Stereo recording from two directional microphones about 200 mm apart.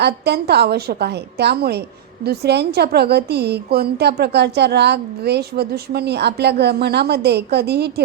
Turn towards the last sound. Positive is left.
turn(degrees=-55)  # may be behind; listen again after turning